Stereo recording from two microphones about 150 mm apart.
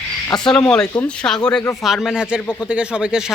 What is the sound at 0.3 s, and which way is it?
Speech, 5° left (ahead or behind).